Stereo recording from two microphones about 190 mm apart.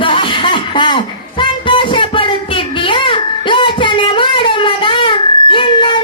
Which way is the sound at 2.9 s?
25° left (ahead or behind).